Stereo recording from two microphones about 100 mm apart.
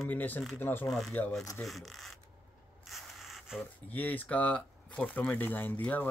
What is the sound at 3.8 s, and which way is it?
Speech, 15° left (ahead or behind).